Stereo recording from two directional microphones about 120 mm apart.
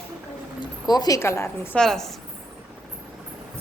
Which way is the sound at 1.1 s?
25° left (ahead or behind).